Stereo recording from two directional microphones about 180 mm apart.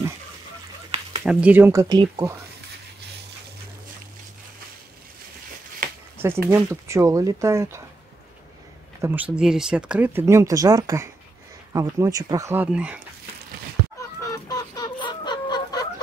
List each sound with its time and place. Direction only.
1.2 s speech: 5° right (ahead or behind)
5.8 s a sound: 50° right (ahead or behind)
6.1 s a sound: 15° right (ahead or behind)
6.5 s speech: 15° right (ahead or behind)
9.0 s speech: 10° right (ahead or behind)
13.9 s chicken: 15° left (ahead or behind)